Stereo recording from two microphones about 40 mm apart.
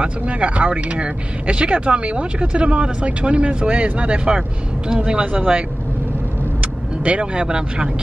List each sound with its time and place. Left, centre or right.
0.0 s speech: right
6.6 s speech: right